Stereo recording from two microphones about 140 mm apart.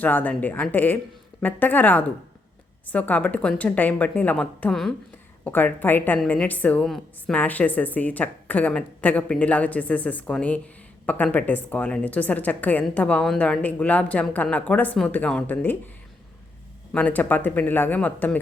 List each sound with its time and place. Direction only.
0.0 s a woman's voice: 10° left (ahead or behind)
5.5 s a woman's voice: 15° left (ahead or behind)
16.9 s a woman's voice: 10° left (ahead or behind)